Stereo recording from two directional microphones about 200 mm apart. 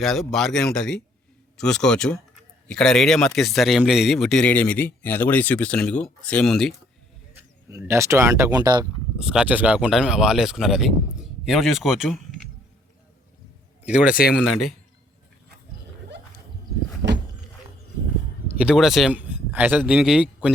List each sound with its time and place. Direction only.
0.0 s speech: centre (ahead or behind)
7.9 s speech: 15° right (ahead or behind)
9.1 s speech: 5° right (ahead or behind)
13.8 s speech: 5° right (ahead or behind)
17.0 s a sound: 20° right (ahead or behind)
18.4 s speech: 5° right (ahead or behind)